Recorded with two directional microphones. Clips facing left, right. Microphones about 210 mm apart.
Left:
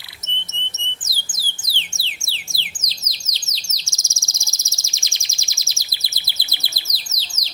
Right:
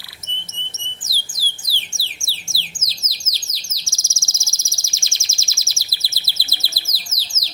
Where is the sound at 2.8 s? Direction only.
20° left (ahead or behind).